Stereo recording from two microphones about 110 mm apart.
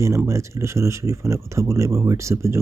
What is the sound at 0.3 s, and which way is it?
Speech, 25° right (ahead or behind).